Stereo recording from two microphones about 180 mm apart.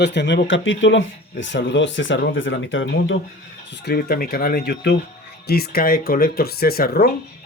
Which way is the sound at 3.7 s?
65° left (ahead or behind).